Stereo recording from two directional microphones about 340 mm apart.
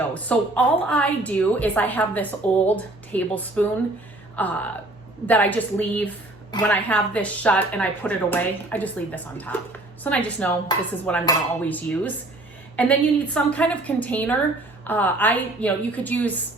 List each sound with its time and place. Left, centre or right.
0.1 s a woman's voice: centre